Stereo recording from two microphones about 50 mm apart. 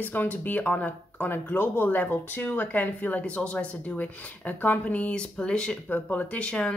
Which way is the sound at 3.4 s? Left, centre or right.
Left.